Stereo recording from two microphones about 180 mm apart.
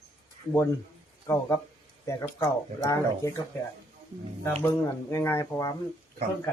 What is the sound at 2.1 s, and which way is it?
Speech, 15° left (ahead or behind).